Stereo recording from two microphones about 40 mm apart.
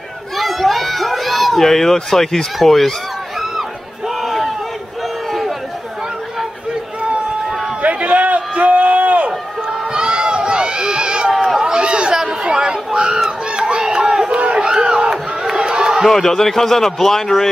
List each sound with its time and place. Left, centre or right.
0.4 s run: centre
4.2 s a sound: centre
7.8 s run: right
9.9 s run: right
11.3 s run: centre
11.6 s chatter: right
13.6 s run: centre
14.6 s crowd: centre
16.1 s a man's voice: centre